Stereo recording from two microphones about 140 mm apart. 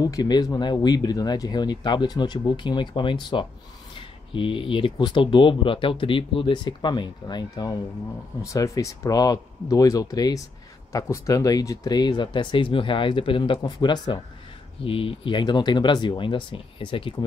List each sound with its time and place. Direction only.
0.0 s speech: 30° left (ahead or behind)
14.9 s speech: 40° left (ahead or behind)